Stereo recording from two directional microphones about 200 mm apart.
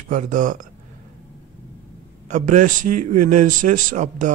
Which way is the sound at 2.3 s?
40° right (ahead or behind).